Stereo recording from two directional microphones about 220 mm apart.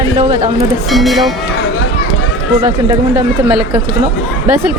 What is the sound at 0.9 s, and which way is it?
Speech, centre (ahead or behind).